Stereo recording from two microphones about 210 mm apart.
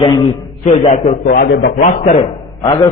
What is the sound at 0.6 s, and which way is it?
A man's voice, 35° left (ahead or behind).